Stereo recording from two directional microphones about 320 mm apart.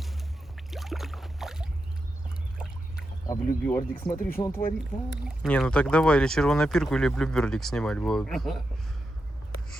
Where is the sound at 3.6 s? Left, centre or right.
Centre.